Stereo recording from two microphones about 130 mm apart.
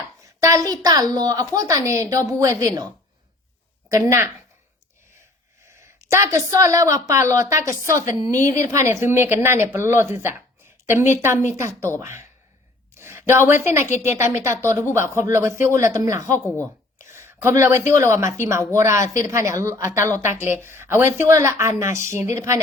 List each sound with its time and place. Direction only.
0.2 s a woman's voice: 25° right (ahead or behind)
3.8 s a woman's voice: 20° right (ahead or behind)
6.1 s a woman's voice: 20° right (ahead or behind)
13.0 s a sound: 20° right (ahead or behind)
13.5 s a woman's voice: 20° right (ahead or behind)
17.1 s a sound: 20° right (ahead or behind)
18.0 s a woman's voice: 20° right (ahead or behind)